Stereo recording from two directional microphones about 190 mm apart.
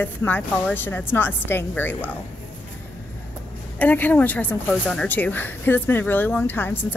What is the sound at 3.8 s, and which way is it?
A woman's voice, 10° left (ahead or behind).